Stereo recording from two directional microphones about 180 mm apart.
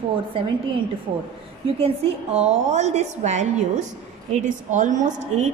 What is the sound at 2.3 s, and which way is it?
A woman's voice, 40° right (ahead or behind).